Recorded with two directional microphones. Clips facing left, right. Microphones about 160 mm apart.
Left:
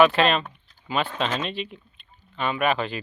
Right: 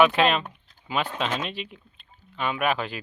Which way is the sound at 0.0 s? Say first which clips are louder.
Left 1 dB; 10° right (ahead or behind).